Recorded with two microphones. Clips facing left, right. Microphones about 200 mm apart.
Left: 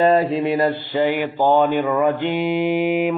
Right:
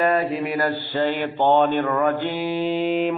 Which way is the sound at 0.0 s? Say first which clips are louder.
Left 5 dB; 25° left (ahead or behind).